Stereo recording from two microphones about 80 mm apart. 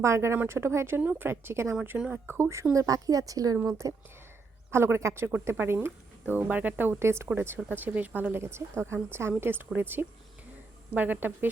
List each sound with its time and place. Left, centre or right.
0.0 s speech: right
2.0 s a woman's voice: centre
2.2 s speech: right
2.7 s speech: right
4.7 s a woman's voice: right